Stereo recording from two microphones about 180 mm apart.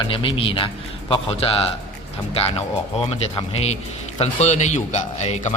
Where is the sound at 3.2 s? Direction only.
35° left (ahead or behind).